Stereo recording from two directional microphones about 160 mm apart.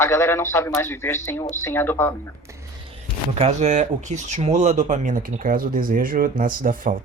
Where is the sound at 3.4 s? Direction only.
45° right (ahead or behind).